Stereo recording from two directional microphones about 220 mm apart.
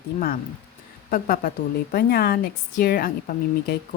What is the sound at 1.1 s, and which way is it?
A woman's voice, 40° left (ahead or behind).